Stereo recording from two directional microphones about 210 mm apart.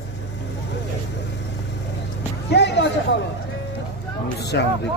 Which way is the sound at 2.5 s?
55° left (ahead or behind).